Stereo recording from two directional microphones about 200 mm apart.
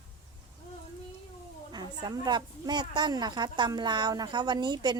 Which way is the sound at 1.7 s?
20° right (ahead or behind).